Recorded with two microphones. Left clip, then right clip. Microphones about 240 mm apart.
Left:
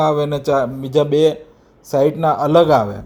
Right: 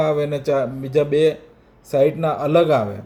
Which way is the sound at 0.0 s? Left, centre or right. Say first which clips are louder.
Left 3 dB; centre.